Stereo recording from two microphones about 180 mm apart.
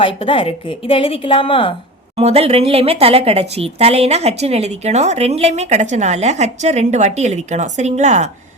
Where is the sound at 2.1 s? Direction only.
35° right (ahead or behind).